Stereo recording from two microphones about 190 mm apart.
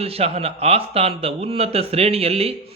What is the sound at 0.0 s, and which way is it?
A man's voice, 30° right (ahead or behind).